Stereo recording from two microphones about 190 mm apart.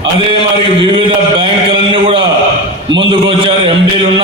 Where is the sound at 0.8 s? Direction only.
25° right (ahead or behind).